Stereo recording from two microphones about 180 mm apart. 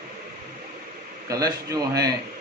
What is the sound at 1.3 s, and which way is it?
Speech, 20° right (ahead or behind).